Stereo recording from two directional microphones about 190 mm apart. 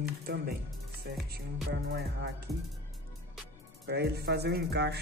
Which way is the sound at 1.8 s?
60° right (ahead or behind).